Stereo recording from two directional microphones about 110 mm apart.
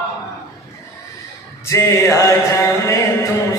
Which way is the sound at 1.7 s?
25° left (ahead or behind).